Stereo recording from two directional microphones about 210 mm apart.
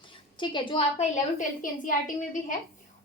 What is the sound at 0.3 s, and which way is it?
A woman's voice, 20° left (ahead or behind).